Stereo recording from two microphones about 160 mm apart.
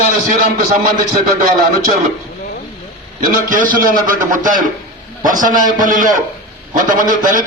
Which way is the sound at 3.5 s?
55° right (ahead or behind).